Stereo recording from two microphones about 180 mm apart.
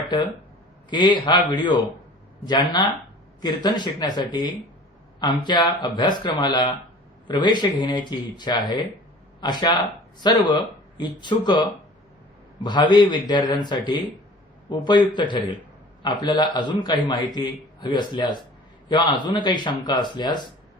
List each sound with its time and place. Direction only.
0.1 s speech: 25° left (ahead or behind)